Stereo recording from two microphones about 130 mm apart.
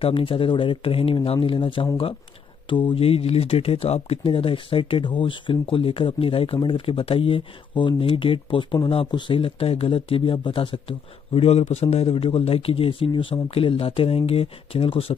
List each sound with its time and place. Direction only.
0.0 s speech: 45° left (ahead or behind)